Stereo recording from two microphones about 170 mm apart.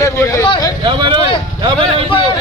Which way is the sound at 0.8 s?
30° right (ahead or behind).